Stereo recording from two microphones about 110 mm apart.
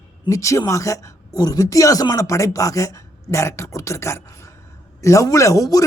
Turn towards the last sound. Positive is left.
turn(degrees=30)  # may be behind; listen again after turning